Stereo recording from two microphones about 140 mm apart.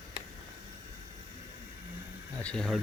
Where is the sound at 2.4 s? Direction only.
5° left (ahead or behind).